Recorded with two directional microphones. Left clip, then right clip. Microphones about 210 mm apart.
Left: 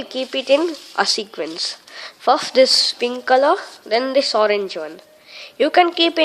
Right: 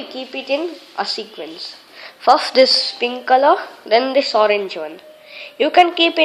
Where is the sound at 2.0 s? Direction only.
30° left (ahead or behind).